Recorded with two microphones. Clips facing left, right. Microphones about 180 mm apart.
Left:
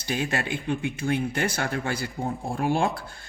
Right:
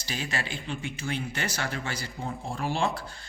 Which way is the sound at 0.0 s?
55° left (ahead or behind).